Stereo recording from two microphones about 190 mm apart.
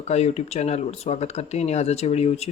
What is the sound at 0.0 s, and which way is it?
Speech, 35° left (ahead or behind).